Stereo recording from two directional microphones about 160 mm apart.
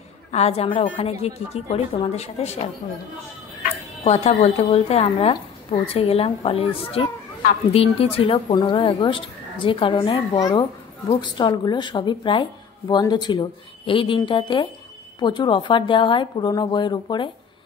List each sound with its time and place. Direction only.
0.3 s speech: 40° left (ahead or behind)
3.6 s speech: 40° left (ahead or behind)